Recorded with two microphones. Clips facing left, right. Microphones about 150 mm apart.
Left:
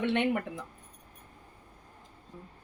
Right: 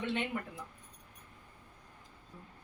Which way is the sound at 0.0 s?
65° left (ahead or behind).